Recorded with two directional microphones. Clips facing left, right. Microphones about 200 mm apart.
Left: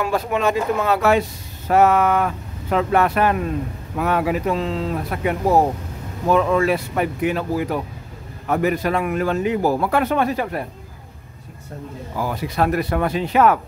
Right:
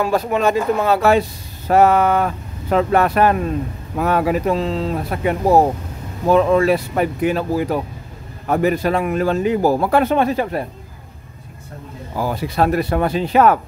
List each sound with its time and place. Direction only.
0.0 s speech: 40° right (ahead or behind)
12.2 s speech: 30° right (ahead or behind)